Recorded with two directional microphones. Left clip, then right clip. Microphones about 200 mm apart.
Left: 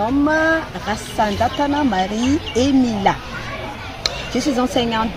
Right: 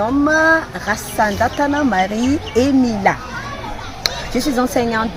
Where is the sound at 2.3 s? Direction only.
15° right (ahead or behind).